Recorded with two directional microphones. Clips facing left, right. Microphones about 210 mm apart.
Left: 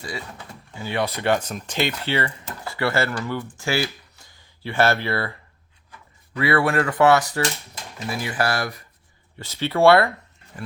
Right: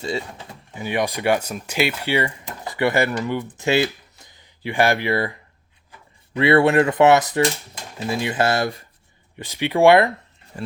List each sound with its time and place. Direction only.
0.0 s speech: 25° right (ahead or behind)